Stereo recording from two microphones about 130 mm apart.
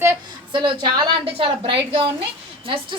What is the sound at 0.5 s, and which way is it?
A woman's voice, 40° right (ahead or behind).